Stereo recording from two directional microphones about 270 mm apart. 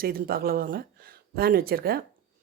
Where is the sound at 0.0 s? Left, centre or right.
Right.